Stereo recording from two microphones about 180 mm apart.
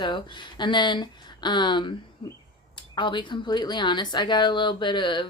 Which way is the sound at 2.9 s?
25° left (ahead or behind).